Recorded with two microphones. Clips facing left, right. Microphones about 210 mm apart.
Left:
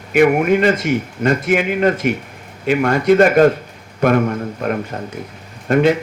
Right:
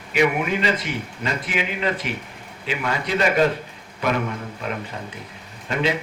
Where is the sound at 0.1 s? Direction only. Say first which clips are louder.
Left 8 dB; 50° left (ahead or behind).